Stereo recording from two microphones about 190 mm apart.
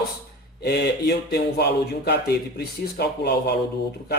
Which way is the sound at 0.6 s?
60° left (ahead or behind).